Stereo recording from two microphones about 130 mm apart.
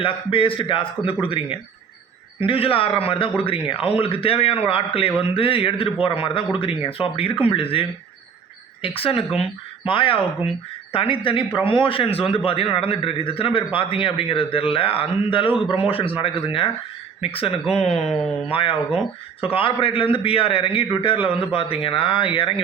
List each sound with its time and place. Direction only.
0.0 s a man's voice: 45° left (ahead or behind)
9.0 s a man's voice: 45° left (ahead or behind)